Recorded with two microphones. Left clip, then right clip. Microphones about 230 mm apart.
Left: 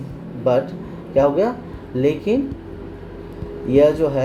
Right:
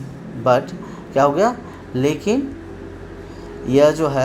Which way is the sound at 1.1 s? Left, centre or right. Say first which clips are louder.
Right 1 dB; centre.